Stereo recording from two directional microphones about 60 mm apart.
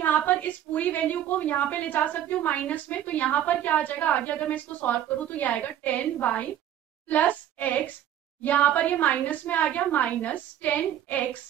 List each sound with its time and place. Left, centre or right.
0.0 s a woman's voice: left